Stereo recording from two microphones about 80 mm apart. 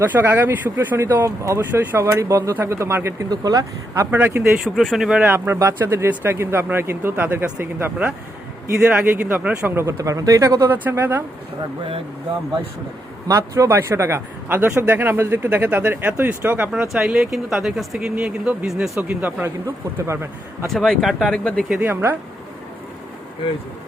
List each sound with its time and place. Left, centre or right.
0.0 s a man's voice: right
3.2 s speech: right
4.1 s a man's voice: right
4.5 s speech: centre
5.2 s a man's voice: right
9.6 s a man's voice: right
10.0 s speech: right
10.7 s a man's voice: right
13.2 s a man's voice: right
16.7 s speech: centre
19.0 s a man's voice: right
20.7 s speech: centre
21.8 s a man's voice: right